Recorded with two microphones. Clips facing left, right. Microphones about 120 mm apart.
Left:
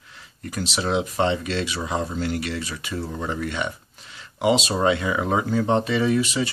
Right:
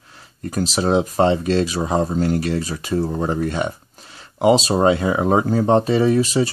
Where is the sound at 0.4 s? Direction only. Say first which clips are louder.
Right 6 dB; 40° right (ahead or behind).